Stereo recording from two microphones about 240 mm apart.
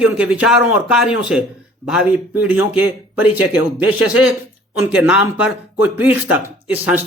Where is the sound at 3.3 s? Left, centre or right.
Left.